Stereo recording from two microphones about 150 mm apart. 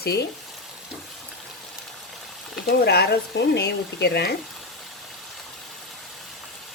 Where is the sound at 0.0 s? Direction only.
90° left.